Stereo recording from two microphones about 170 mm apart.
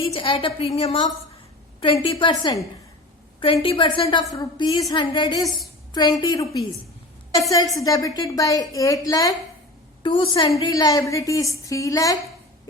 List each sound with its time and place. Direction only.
0.0 s a woman's voice: 30° left (ahead or behind)